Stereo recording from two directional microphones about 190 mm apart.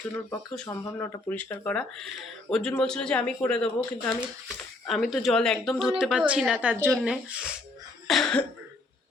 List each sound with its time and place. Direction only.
0.7 s speech: 15° left (ahead or behind); by 7.5 s 5° right (ahead or behind)
8.0 s cough: centre (ahead or behind)